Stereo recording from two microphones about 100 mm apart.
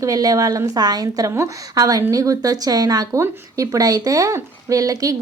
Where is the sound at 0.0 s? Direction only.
40° right (ahead or behind).